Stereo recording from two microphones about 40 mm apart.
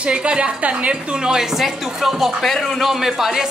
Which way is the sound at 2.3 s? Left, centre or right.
Centre.